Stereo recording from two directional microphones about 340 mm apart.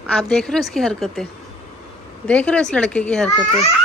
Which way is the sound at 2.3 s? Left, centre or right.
Centre.